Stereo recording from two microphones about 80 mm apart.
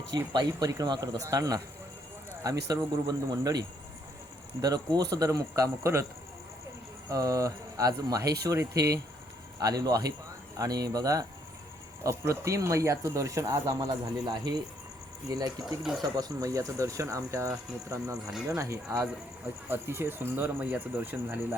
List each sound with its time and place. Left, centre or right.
0.1 s speech: right
5.5 s speech: right
7.1 s speech: right
12.0 s speech: right
15.8 s speech: centre
16.1 s speech: right
17.5 s speech: centre
18.4 s speech: right
19.7 s speech: right